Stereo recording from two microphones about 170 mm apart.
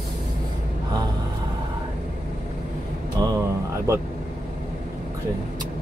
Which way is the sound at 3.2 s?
20° right (ahead or behind).